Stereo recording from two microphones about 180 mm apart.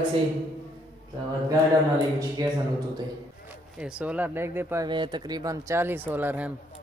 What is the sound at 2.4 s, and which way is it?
Speech, 20° right (ahead or behind).